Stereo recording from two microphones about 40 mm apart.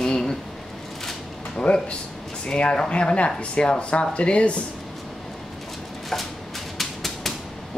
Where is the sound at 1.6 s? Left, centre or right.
Left.